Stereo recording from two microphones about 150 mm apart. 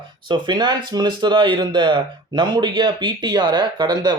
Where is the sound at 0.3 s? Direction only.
30° right (ahead or behind).